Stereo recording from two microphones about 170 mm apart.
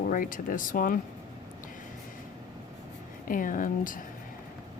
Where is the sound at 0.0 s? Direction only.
55° left (ahead or behind).